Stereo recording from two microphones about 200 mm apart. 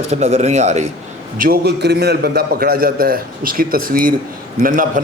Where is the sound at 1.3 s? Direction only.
45° right (ahead or behind).